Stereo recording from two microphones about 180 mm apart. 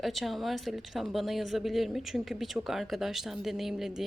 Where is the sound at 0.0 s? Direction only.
Centre (ahead or behind).